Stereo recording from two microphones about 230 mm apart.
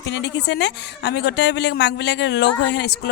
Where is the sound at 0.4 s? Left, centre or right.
Left.